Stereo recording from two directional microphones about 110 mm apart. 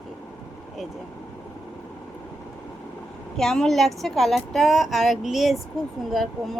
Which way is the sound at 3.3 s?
5° left (ahead or behind).